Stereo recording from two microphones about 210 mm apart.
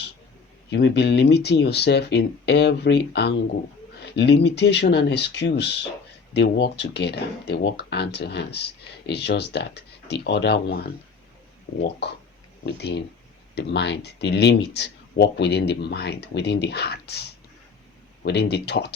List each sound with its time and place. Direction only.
0.7 s speech: 55° left (ahead or behind)